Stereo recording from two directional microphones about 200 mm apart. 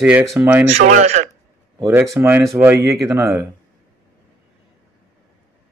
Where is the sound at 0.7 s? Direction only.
35° right (ahead or behind).